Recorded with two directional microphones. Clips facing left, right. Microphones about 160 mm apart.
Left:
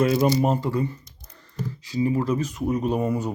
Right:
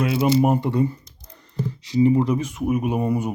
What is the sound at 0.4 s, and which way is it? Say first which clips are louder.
Speech: right 3 dB; 20° right (ahead or behind).